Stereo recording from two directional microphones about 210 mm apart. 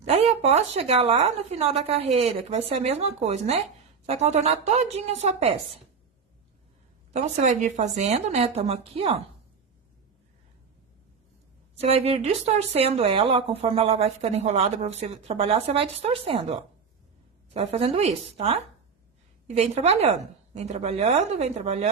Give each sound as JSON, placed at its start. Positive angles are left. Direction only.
{"t": 0.1, "sound": "a woman's voice", "side_deg": -30}
{"t": 7.1, "sound": "a woman's voice", "side_deg": -30}
{"t": 11.8, "sound": "a woman's voice", "side_deg": -30}